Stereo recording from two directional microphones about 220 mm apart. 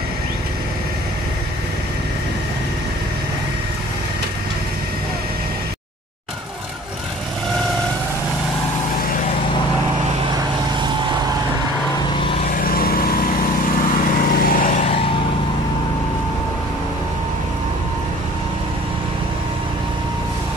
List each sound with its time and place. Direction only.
12.5 s vehicle: 40° left (ahead or behind)
14.1 s lawn mower: 40° left (ahead or behind)